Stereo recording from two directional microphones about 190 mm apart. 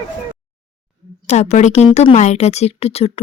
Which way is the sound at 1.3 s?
35° left (ahead or behind).